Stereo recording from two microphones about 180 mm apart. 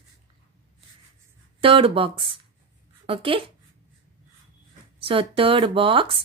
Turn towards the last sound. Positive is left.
turn(degrees=-30)  # may be behind; listen again after turning